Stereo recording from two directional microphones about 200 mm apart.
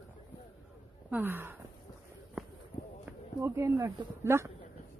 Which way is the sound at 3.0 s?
15° right (ahead or behind).